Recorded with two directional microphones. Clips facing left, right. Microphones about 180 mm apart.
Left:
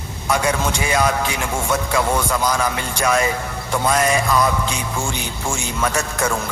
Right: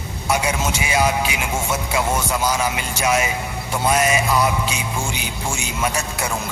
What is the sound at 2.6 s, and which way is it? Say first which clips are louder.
A man's voice: left 1 dB; 20° right (ahead or behind).